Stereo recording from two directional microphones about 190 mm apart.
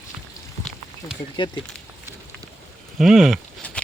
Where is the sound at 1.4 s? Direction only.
25° left (ahead or behind).